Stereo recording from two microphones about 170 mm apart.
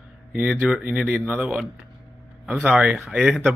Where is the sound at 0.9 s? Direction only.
5° right (ahead or behind).